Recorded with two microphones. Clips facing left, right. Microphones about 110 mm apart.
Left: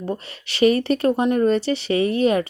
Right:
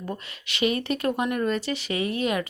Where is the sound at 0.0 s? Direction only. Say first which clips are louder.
Left 6 dB; 30° left (ahead or behind).